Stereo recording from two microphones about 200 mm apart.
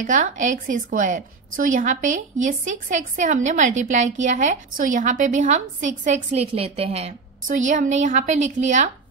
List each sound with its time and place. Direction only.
0.0 s a woman's voice: 40° right (ahead or behind)